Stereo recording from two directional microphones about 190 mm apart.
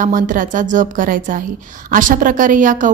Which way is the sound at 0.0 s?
45° right (ahead or behind).